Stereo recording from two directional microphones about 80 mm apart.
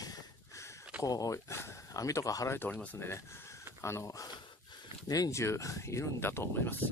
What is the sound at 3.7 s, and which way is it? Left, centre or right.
Speech, left.